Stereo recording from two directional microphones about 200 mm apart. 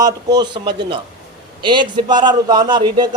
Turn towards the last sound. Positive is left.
turn(degrees=-20)  # may be behind; listen again after turning